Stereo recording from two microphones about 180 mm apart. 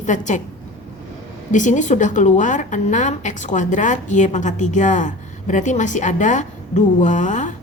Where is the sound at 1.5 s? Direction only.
45° left (ahead or behind).